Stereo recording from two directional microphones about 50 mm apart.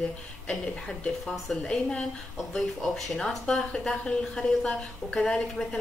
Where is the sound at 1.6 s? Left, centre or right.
Centre.